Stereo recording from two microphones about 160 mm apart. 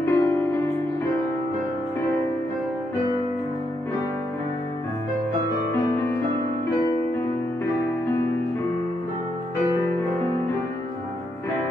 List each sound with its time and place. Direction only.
0.0 s music: 15° left (ahead or behind)
5.7 s music: 15° left (ahead or behind)